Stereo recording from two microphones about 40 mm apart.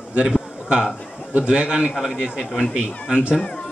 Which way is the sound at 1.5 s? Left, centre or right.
Right.